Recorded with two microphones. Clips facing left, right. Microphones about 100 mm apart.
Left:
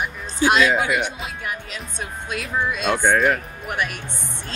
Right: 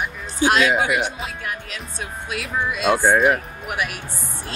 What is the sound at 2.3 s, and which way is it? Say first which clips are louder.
Speech: left 1 dB; 5° right (ahead or behind).